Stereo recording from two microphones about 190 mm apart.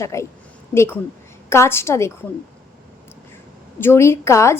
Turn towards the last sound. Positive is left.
turn(degrees=15)  # may be behind; listen again after turning